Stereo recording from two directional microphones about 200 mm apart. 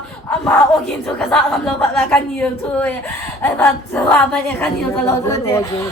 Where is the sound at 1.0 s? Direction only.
5° left (ahead or behind).